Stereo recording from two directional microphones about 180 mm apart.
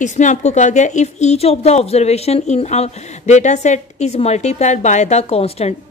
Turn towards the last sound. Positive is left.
turn(degrees=35)  # may be behind; listen again after turning